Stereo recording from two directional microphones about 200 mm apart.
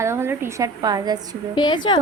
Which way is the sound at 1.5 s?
20° left (ahead or behind).